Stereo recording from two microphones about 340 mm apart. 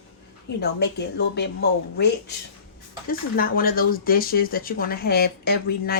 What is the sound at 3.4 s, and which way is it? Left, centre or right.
Speech, left.